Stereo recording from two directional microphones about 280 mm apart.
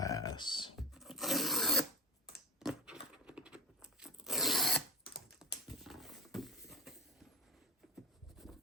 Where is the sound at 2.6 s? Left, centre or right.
Centre.